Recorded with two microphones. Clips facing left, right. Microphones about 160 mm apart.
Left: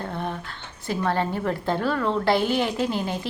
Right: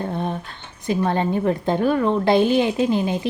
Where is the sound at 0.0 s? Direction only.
20° right (ahead or behind).